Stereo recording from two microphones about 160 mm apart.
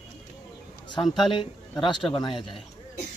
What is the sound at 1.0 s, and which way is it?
Speech, centre (ahead or behind).